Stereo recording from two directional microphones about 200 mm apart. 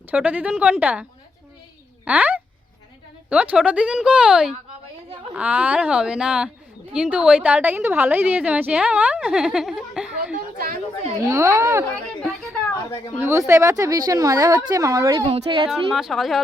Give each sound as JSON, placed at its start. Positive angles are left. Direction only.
{"t": 0.1, "sound": "speech", "side_deg": -5}
{"t": 2.0, "sound": "a woman's voice", "side_deg": -5}
{"t": 10.3, "sound": "chatter", "side_deg": -50}
{"t": 11.3, "sound": "speech", "side_deg": -10}
{"t": 13.1, "sound": "speech", "side_deg": -15}
{"t": 15.3, "sound": "a woman's voice", "side_deg": -30}
{"t": 15.7, "sound": "a woman's voice", "side_deg": 0}